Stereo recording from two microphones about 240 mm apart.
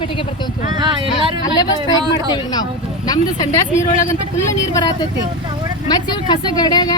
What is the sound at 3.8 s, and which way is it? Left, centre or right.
Speech, left.